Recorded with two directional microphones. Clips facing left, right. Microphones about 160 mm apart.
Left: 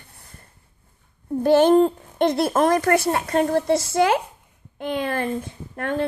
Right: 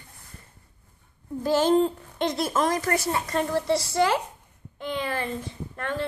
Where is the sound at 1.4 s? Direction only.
60° left (ahead or behind).